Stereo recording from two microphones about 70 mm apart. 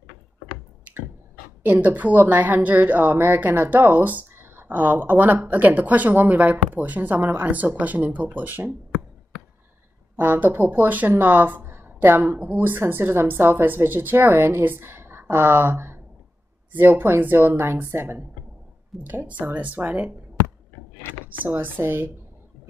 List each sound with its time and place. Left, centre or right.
1.7 s speech: right
10.1 s speech: right
21.4 s speech: right